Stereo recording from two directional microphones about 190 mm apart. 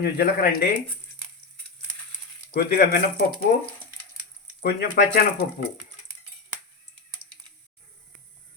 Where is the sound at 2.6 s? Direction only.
50° left (ahead or behind).